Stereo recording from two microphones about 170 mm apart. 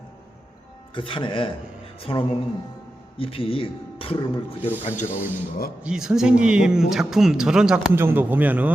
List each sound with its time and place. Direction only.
0.9 s speech: 30° left (ahead or behind)
5.1 s speech: 10° right (ahead or behind)